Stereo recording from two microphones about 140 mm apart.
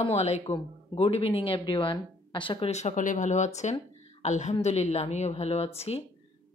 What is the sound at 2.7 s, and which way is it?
A woman's voice, 55° left (ahead or behind).